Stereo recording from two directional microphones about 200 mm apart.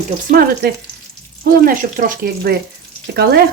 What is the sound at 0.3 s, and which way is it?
Speech, 45° right (ahead or behind).